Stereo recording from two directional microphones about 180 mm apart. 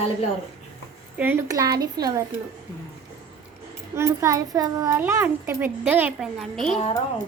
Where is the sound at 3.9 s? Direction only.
15° right (ahead or behind); by 6.8 s centre (ahead or behind).